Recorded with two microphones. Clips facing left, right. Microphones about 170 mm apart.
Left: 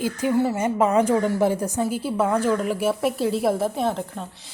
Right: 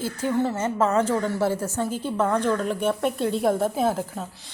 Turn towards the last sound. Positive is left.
turn(degrees=0)  # may be behind; listen again after turning